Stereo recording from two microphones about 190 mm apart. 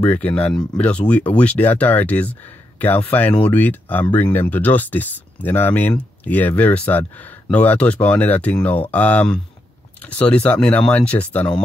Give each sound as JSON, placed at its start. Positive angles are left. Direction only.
{"t": 0.0, "sound": "speech", "side_deg": 5}